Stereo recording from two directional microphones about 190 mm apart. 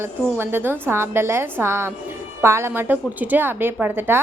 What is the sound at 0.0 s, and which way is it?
A woman's voice, 10° right (ahead or behind).